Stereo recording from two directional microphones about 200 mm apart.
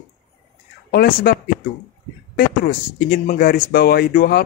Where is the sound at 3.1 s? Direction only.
50° left (ahead or behind).